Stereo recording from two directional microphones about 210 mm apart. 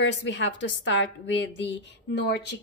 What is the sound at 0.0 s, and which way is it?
A woman's voice, 60° left (ahead or behind).